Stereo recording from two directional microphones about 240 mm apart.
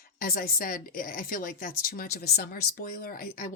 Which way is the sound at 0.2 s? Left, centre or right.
Left.